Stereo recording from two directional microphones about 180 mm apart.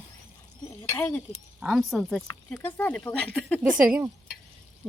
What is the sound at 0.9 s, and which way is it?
Speech, 10° left (ahead or behind).